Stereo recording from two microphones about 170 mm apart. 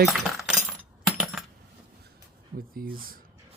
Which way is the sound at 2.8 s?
55° right (ahead or behind).